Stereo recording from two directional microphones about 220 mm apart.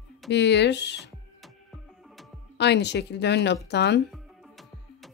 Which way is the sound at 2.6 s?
50° left (ahead or behind).